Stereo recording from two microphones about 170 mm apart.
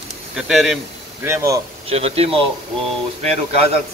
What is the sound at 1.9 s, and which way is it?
Speech, 35° right (ahead or behind).